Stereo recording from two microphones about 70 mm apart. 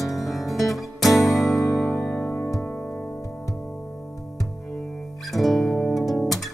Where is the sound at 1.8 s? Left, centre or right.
Left.